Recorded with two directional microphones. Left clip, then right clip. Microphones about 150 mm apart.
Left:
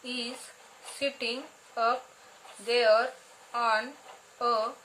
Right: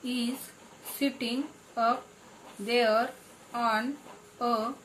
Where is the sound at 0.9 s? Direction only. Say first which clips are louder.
Even; 30° left (ahead or behind).